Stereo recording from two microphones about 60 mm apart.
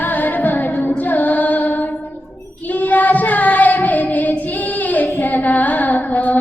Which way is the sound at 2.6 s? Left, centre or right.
Left.